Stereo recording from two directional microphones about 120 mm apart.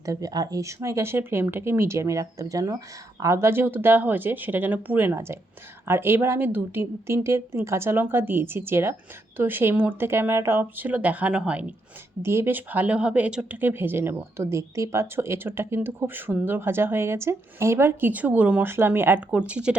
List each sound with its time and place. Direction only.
0.0 s speech: 30° right (ahead or behind); by 11.6 s 10° right (ahead or behind)
12.2 s speech: 20° right (ahead or behind)